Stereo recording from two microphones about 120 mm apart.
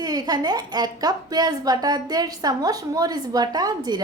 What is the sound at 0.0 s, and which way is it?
A woman's voice, 35° right (ahead or behind).